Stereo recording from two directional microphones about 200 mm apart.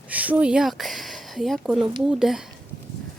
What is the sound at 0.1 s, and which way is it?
Speech, 5° right (ahead or behind).